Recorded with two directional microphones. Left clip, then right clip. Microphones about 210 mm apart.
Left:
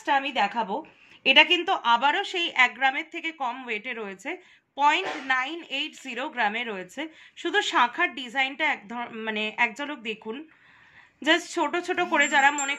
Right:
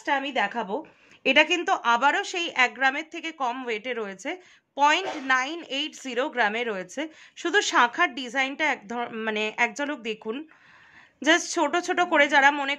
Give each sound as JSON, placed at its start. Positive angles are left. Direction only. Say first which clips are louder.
{"t": 0.0, "sound": "a woman's voice", "louder": "left 1 dB", "side_deg": -25}